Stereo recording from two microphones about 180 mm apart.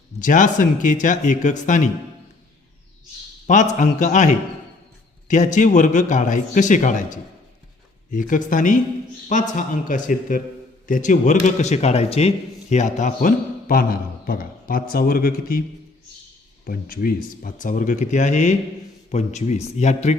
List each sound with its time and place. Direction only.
0.2 s a man's voice: 45° left (ahead or behind)
3.4 s a man's voice: 45° left (ahead or behind)
16.6 s a man's voice: 55° left (ahead or behind)